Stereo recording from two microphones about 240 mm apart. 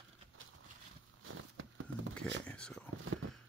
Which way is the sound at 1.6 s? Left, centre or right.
Right.